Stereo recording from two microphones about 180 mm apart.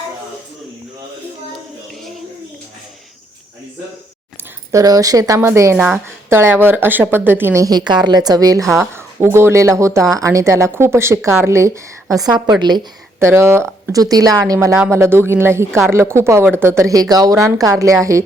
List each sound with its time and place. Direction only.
4.7 s speech: 20° right (ahead or behind)
8.6 s speech: centre (ahead or behind)
8.9 s speech: 15° right (ahead or behind)